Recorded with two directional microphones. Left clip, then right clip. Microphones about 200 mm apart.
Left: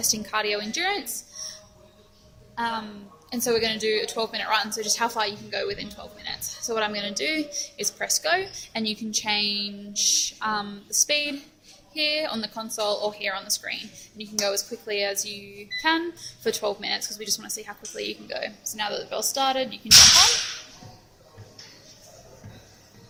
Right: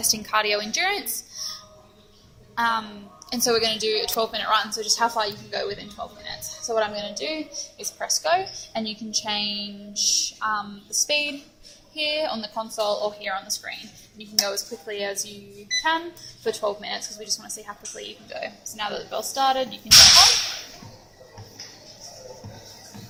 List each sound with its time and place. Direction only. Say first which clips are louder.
0.0 s a woman's voice: right 3 dB; 15° left (ahead or behind)
2.6 s a woman's voice: right 5 dB; 10° left (ahead or behind)
16.4 s a woman's voice: right 1 dB; 20° left (ahead or behind)